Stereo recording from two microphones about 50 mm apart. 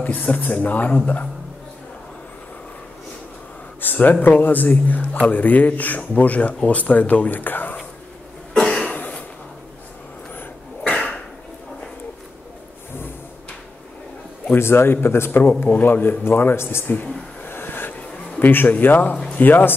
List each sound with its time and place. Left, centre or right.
0.0 s speech: left
3.8 s speech: left
8.5 s cough: centre
8.8 s a sound: left
10.9 s dog: left
14.5 s a man's voice: left
17.4 s a sound: left
18.4 s speech: left